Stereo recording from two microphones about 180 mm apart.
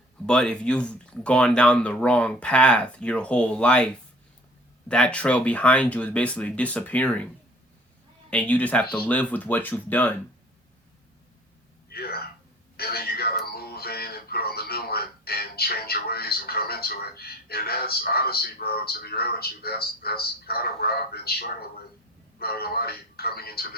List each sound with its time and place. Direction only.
0.3 s speech: 5° left (ahead or behind)
4.9 s speech: 5° left (ahead or behind)
8.3 s speech: 5° left (ahead or behind)
11.9 s a sound: 60° left (ahead or behind)
12.7 s music: 60° left (ahead or behind)
22.4 s speech: 60° left (ahead or behind)